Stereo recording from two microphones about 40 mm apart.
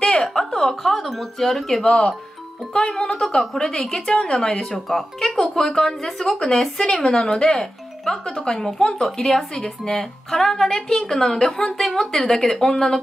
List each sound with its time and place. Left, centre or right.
0.3 s speech: centre
1.9 s a woman's voice: left